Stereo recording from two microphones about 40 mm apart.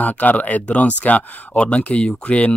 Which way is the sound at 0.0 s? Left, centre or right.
Left.